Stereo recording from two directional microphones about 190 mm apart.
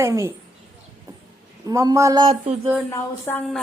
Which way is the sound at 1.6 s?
15° right (ahead or behind).